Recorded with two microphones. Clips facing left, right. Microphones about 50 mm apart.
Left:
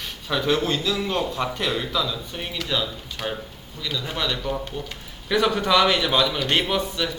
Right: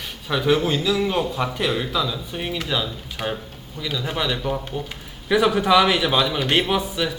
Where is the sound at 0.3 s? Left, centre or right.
Centre.